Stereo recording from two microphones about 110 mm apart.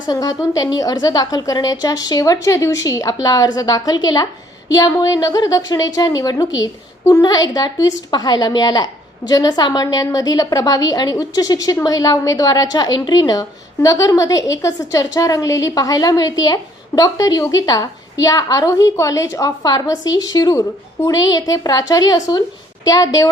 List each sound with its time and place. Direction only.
0.1 s a woman's voice: 35° left (ahead or behind)